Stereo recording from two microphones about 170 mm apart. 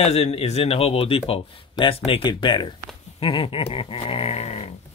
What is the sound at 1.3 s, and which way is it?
Speech, 35° left (ahead or behind).